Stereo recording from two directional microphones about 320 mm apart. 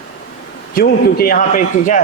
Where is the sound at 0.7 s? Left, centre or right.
Left.